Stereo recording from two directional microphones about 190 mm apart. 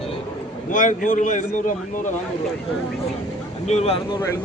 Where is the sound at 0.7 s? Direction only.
45° left (ahead or behind).